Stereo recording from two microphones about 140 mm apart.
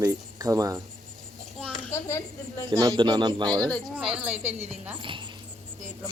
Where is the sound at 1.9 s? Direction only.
20° left (ahead or behind).